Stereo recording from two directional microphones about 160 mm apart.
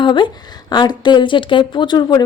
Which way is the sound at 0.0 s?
30° left (ahead or behind).